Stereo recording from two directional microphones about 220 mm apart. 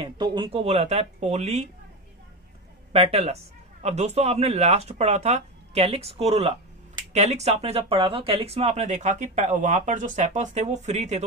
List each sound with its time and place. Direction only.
0.0 s speech: 20° right (ahead or behind)
2.9 s speech: 25° right (ahead or behind)